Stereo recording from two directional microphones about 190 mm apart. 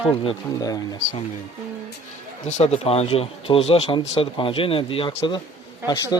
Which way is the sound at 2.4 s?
35° left (ahead or behind).